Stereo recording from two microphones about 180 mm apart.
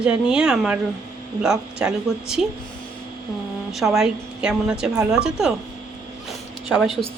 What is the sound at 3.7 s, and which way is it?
A woman's voice, centre (ahead or behind).